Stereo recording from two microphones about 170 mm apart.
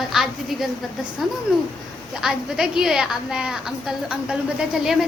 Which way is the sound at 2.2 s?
5° right (ahead or behind).